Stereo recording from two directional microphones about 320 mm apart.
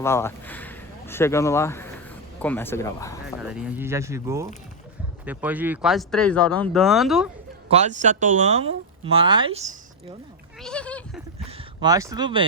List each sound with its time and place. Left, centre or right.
0.0 s speech: centre
3.4 s speech: centre
7.7 s speech: right
10.6 s speech: centre
11.3 s a sound: centre